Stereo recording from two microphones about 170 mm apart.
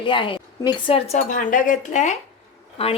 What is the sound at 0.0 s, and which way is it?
A woman's voice, 30° left (ahead or behind).